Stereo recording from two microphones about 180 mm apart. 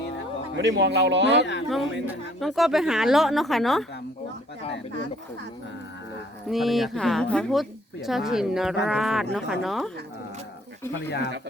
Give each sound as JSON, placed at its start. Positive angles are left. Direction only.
{"t": 0.5, "sound": "speech", "side_deg": -75}
{"t": 1.7, "sound": "a woman's voice", "side_deg": 0}
{"t": 6.5, "sound": "a woman's voice", "side_deg": 0}